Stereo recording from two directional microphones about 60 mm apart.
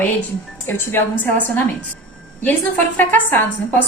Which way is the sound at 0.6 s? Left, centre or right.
Left.